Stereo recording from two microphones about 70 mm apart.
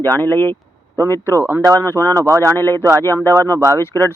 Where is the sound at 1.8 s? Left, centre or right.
Left.